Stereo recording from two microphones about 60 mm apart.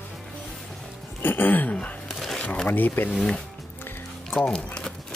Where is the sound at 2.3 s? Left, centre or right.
Centre.